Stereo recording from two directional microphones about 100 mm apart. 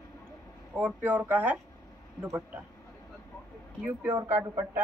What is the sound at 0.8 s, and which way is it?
Speech, 15° right (ahead or behind).